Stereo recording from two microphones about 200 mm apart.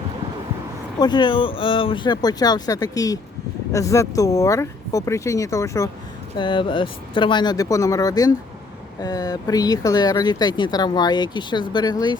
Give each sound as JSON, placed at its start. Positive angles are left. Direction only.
{"t": 0.9, "sound": "speech", "side_deg": 20}